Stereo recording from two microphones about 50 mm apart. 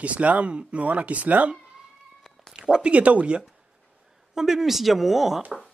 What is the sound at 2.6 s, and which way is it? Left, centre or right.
Speech, centre.